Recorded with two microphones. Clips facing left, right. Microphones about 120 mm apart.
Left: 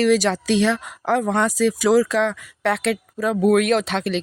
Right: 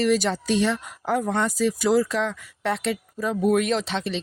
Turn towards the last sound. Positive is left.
turn(degrees=60)  # may be behind; listen again after turning